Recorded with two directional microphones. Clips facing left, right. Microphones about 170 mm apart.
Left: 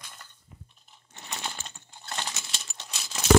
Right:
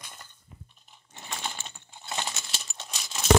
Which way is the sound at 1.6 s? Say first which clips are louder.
Right 2 dB; 5° right (ahead or behind).